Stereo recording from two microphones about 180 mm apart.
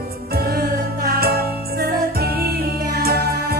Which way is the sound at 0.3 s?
60° right (ahead or behind).